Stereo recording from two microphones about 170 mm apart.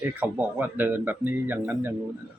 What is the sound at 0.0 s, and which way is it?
Speech, 10° right (ahead or behind).